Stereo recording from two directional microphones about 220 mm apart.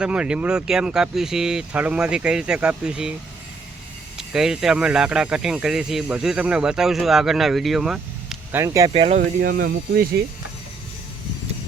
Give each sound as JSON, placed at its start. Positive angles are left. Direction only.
{"t": 0.0, "sound": "speech", "side_deg": -5}
{"t": 4.2, "sound": "speech", "side_deg": 0}
{"t": 8.6, "sound": "speech", "side_deg": -15}
{"t": 8.9, "sound": "speech", "side_deg": -30}
{"t": 9.4, "sound": "speech", "side_deg": -45}